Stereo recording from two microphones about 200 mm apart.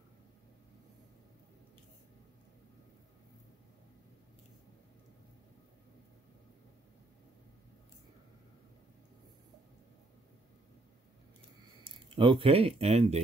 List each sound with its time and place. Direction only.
11.8 s speech: 25° right (ahead or behind)